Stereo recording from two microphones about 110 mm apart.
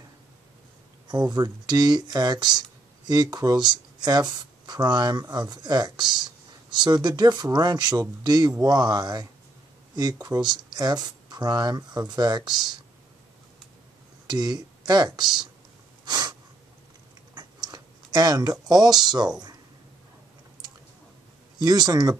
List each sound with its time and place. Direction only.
1.0 s speech: 40° right (ahead or behind)
14.2 s speech: 40° right (ahead or behind)
16.1 s sneeze: 40° right (ahead or behind)
17.3 s a sound: 40° right (ahead or behind)
19.0 s speech: 40° right (ahead or behind)
21.5 s speech: 40° right (ahead or behind)